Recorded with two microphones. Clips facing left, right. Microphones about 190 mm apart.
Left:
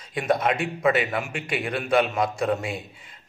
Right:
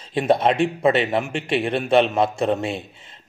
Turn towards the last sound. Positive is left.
turn(degrees=-25)  # may be behind; listen again after turning